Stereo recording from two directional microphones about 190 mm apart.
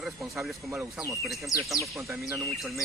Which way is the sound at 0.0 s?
Centre (ahead or behind).